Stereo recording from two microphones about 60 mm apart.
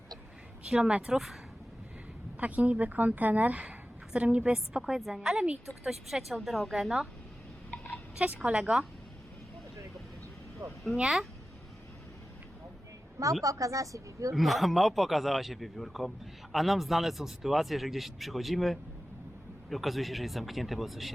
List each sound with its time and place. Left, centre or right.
0.7 s a woman's voice: centre
1.1 s a man's voice: centre
2.4 s a woman's voice: right; by 6.9 s centre
8.4 s a woman's voice: centre
10.6 s speech: right
11.0 s a woman's voice: centre
13.4 s speech: right
14.3 s a man's voice: centre